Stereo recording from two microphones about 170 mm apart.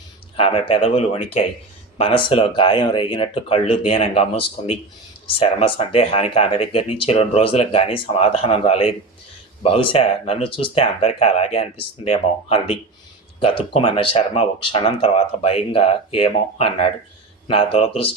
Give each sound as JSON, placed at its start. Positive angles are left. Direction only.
{"t": 0.3, "sound": "speech", "side_deg": 35}